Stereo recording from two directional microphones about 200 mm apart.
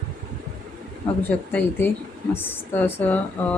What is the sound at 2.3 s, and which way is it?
A woman's voice, 10° left (ahead or behind).